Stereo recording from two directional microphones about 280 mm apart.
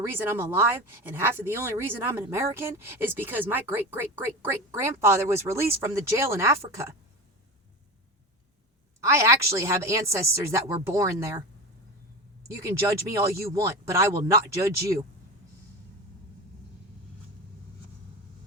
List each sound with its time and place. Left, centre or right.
0.0 s speech: centre
9.0 s speech: centre
12.5 s speech: centre